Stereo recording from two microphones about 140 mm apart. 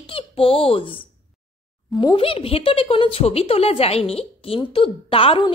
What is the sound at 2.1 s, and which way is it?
Speech, 40° left (ahead or behind).